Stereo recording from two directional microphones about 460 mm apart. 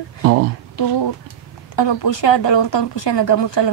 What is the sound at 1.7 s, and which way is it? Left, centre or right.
Speech, left.